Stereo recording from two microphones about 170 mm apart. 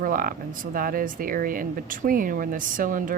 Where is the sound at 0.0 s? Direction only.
55° right (ahead or behind).